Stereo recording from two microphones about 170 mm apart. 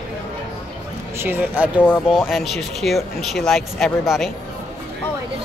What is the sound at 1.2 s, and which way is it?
Speech, 10° right (ahead or behind).